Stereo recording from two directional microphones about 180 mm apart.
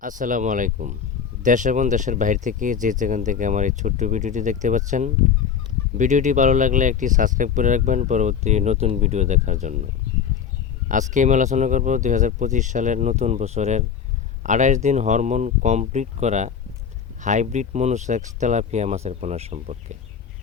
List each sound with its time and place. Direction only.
0.0 s speech: 45° right (ahead or behind)